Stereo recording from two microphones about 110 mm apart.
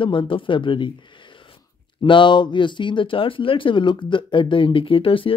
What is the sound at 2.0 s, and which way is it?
Speech, 45° left (ahead or behind).